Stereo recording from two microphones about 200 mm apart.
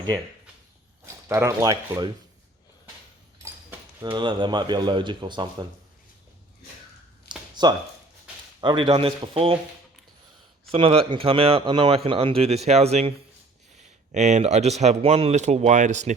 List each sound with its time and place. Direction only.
1.0 s speech: 15° right (ahead or behind)
3.3 s speech: 20° right (ahead or behind)
7.5 s a sound: 20° right (ahead or behind)
8.6 s a man's voice: 25° right (ahead or behind)
10.7 s a man's voice: 30° right (ahead or behind)